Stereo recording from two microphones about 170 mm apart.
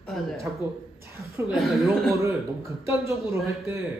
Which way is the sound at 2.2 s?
15° right (ahead or behind).